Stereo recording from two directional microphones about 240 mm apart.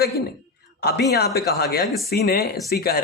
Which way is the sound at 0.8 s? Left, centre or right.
Left.